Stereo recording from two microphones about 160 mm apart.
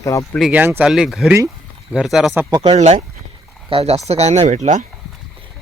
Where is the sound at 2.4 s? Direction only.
15° right (ahead or behind).